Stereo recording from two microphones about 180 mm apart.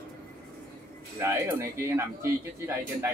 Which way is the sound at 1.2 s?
15° right (ahead or behind).